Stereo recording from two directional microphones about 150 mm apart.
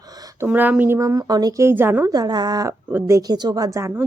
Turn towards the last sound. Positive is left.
turn(degrees=-20)  # may be behind; listen again after turning